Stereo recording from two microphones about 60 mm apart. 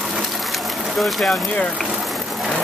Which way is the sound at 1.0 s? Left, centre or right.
Centre.